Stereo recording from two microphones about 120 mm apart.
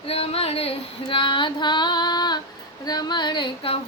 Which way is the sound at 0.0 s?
55° left (ahead or behind).